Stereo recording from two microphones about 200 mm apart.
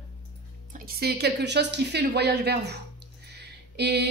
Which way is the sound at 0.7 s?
50° right (ahead or behind).